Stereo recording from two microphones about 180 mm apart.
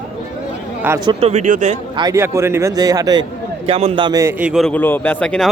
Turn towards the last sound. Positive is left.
turn(degrees=10)  # may be behind; listen again after turning